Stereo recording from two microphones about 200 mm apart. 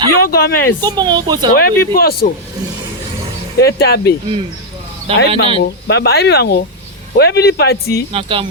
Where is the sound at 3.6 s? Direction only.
50° left (ahead or behind).